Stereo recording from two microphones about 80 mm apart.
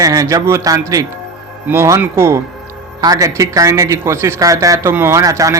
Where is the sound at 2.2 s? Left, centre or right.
Right.